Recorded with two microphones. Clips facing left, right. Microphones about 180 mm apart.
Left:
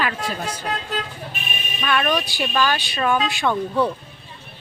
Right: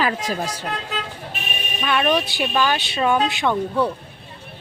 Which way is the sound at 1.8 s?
20° right (ahead or behind).